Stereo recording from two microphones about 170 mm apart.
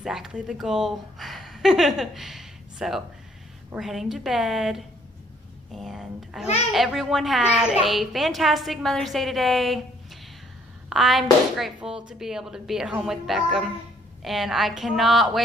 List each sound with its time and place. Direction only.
0.0 s a child's voice: 5° right (ahead or behind)
10.9 s a child's voice: centre (ahead or behind)